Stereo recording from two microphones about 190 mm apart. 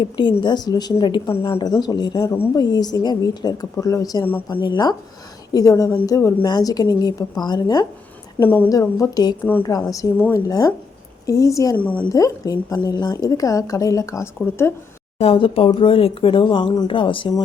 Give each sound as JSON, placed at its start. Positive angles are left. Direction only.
{"t": 0.0, "sound": "a woman's voice", "side_deg": 25}
{"t": 8.4, "sound": "a woman's voice", "side_deg": 10}
{"t": 12.1, "sound": "a woman's voice", "side_deg": 20}
{"t": 15.2, "sound": "a woman's voice", "side_deg": 30}